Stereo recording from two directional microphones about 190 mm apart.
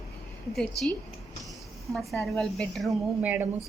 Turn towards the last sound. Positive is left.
turn(degrees=-5)  # may be behind; listen again after turning